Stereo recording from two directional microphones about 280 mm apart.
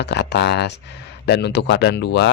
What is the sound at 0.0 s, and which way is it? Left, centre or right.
Speech, left.